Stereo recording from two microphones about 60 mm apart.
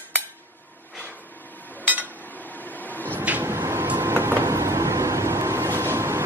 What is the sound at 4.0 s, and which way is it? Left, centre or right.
Vehicle, right.